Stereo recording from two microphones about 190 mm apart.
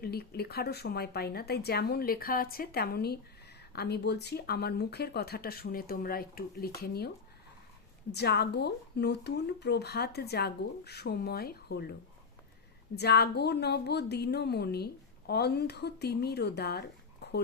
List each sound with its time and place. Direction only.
0.0 s speech: 55° left (ahead or behind)
8.1 s speech: 60° left (ahead or behind)
13.0 s speech: 60° left (ahead or behind)